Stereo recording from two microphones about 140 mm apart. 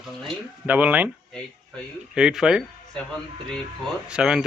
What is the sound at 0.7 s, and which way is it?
Speech, 10° right (ahead or behind).